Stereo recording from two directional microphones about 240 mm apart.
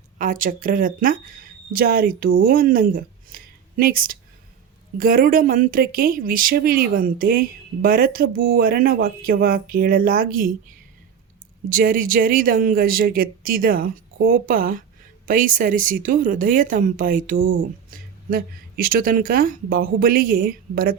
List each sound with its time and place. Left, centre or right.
0.2 s speech: right